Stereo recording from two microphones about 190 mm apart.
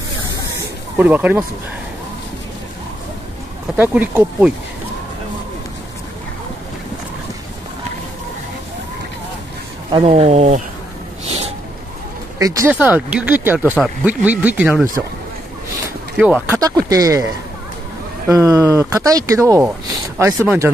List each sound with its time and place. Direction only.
0.6 s a sound: 10° right (ahead or behind)
3.7 s speech: 10° right (ahead or behind)
9.8 s speech: 30° right (ahead or behind)
12.4 s speech: 15° right (ahead or behind)
16.2 s speech: 5° right (ahead or behind)
16.5 s speech: 20° right (ahead or behind)
18.3 s speech: 15° right (ahead or behind)